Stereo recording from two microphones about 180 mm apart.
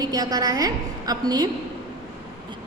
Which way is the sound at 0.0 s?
20° right (ahead or behind).